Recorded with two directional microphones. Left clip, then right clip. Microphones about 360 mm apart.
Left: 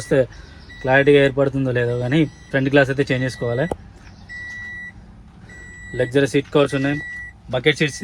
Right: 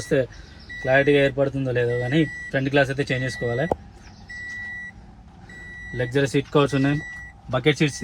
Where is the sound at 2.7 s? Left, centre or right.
Centre.